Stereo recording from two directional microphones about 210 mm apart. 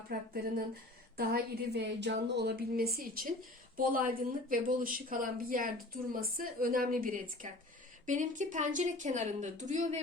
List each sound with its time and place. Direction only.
0.1 s a woman's voice: 45° right (ahead or behind)